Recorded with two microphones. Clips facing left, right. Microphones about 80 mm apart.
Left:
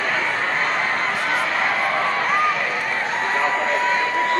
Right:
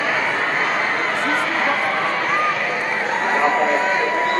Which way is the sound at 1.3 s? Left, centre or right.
Centre.